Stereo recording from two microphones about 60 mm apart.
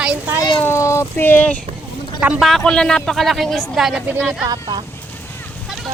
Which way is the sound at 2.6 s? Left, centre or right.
Centre.